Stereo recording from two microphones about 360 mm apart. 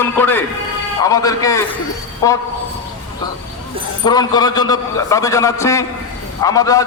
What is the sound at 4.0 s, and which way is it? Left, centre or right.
A man's voice, centre.